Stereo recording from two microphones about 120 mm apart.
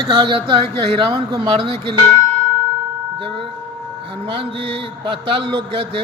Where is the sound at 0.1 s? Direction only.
40° right (ahead or behind).